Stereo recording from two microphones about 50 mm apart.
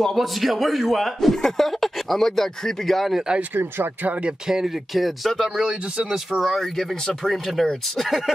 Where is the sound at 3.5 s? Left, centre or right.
Right.